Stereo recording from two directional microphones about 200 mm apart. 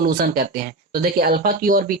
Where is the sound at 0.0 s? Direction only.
45° right (ahead or behind).